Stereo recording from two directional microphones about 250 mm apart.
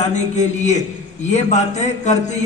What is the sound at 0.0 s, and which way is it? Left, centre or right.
A man's voice, left.